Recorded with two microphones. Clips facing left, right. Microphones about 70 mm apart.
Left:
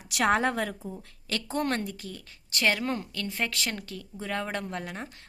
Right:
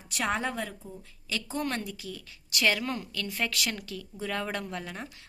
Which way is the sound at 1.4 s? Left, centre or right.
Left.